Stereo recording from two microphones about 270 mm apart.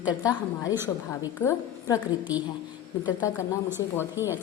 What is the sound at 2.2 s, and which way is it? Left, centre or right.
Speech, centre.